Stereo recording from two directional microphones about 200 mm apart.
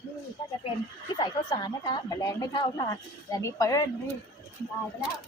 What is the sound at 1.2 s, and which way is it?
A woman's voice, 20° left (ahead or behind).